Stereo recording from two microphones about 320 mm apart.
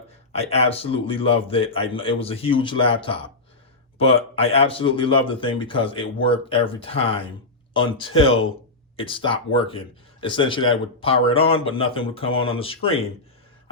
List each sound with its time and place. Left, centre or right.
0.3 s speech: centre